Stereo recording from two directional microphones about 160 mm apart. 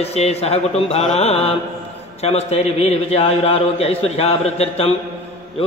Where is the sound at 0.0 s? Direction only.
40° left (ahead or behind).